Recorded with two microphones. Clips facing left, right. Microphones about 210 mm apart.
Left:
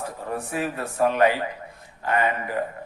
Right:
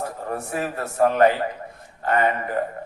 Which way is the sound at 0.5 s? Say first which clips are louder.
Right 1 dB; 45° right (ahead or behind).